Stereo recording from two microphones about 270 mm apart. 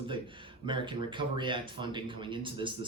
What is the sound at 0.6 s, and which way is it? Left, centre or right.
Speech, centre.